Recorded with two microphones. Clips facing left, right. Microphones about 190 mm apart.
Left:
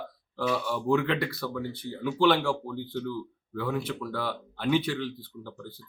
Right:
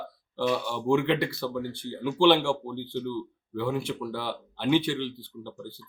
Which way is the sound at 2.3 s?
25° right (ahead or behind).